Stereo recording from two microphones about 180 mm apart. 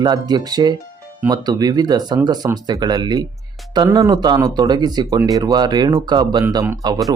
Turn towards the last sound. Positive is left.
turn(degrees=-20)  # may be behind; listen again after turning